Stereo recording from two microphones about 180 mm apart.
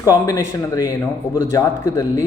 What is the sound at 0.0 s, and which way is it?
Speech, 20° left (ahead or behind).